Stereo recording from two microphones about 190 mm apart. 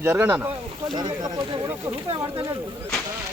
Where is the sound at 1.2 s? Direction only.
20° right (ahead or behind).